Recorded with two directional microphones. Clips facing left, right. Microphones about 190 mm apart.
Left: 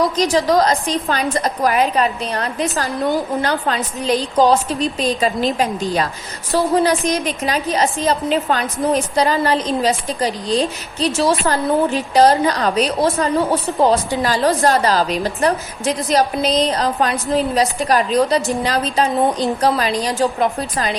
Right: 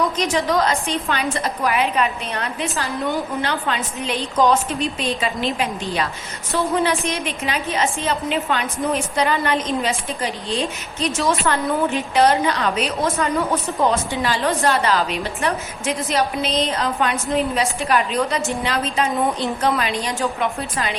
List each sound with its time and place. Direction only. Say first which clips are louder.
0.3 s a woman's voice: left 4 dB; 35° left (ahead or behind)